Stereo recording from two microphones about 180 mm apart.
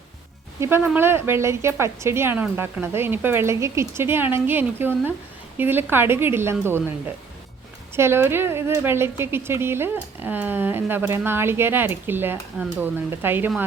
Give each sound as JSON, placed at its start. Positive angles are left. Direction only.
{"t": 0.9, "sound": "speech", "side_deg": -15}
{"t": 7.9, "sound": "speech", "side_deg": -15}